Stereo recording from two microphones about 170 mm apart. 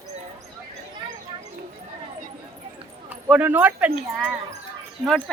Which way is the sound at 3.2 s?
10° right (ahead or behind).